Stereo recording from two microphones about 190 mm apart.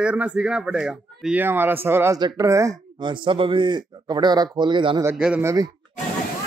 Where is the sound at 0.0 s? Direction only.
5° right (ahead or behind); by 5.0 s 25° right (ahead or behind).